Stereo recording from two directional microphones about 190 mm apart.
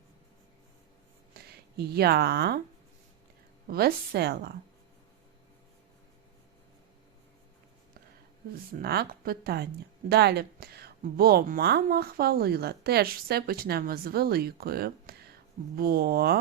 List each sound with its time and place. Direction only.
1.3 s speech: 55° right (ahead or behind)
3.7 s a woman's voice: 50° right (ahead or behind)
8.8 s a woman's voice: 55° right (ahead or behind)